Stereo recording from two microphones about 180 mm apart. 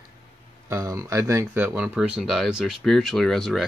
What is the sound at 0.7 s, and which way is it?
Speech, 20° right (ahead or behind).